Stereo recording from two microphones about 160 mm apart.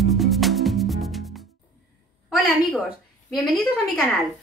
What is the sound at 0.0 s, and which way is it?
Music, centre (ahead or behind).